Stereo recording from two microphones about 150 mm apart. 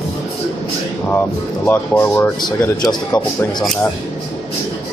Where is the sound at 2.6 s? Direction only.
25° left (ahead or behind).